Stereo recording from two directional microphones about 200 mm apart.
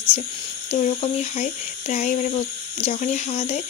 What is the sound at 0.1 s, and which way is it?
Speech, 30° left (ahead or behind).